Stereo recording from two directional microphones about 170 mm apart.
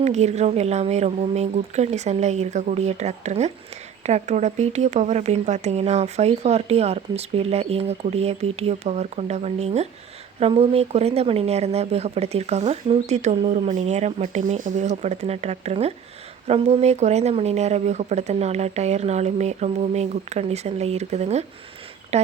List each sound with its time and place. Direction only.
0.0 s speech: 40° right (ahead or behind)